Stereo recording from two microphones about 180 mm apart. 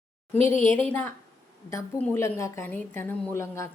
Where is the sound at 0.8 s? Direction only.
10° left (ahead or behind).